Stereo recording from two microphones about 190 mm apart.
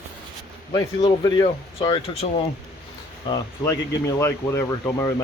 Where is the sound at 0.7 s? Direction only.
20° left (ahead or behind).